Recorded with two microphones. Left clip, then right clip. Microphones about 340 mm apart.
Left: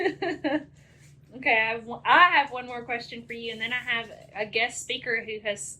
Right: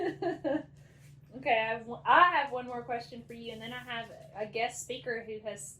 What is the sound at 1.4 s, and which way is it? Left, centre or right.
A woman's voice, left.